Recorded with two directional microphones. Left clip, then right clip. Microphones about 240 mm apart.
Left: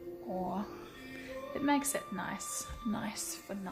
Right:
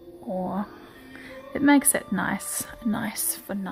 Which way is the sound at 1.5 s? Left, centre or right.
Right.